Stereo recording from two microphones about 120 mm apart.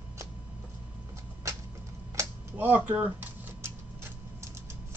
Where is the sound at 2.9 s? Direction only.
20° right (ahead or behind).